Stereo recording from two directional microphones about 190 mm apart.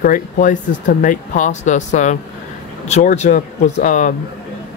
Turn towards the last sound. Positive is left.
turn(degrees=40)  # may be behind; listen again after turning